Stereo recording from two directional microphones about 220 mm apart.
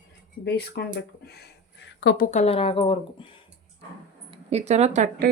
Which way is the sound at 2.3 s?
25° left (ahead or behind).